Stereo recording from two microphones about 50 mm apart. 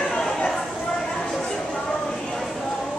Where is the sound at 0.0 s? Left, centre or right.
Centre.